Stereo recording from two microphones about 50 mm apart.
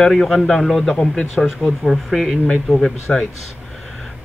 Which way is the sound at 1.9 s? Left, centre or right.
Centre.